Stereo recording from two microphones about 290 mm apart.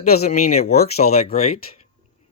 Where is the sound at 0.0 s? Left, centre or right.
Left.